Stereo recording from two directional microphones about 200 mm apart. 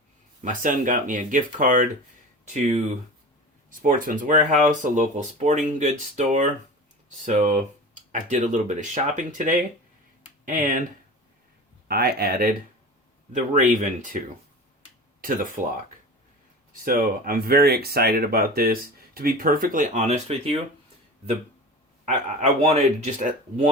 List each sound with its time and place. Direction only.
0.4 s speech: 40° right (ahead or behind)
2.4 s a sound: 35° right (ahead or behind)
3.7 s speech: 40° right (ahead or behind)
11.9 s speech: 50° right (ahead or behind)
13.3 s speech: 40° right (ahead or behind)
15.6 s speech: 40° right (ahead or behind)
16.8 s speech: 45° right (ahead or behind)
22.0 s speech: 35° right (ahead or behind)